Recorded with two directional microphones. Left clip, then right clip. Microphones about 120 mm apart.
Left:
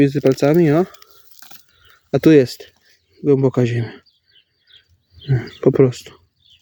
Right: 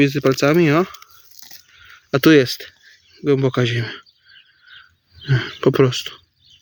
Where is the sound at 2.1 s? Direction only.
25° left (ahead or behind).